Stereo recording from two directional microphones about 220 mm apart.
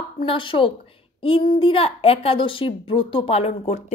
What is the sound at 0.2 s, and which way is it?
A woman's voice, 25° left (ahead or behind).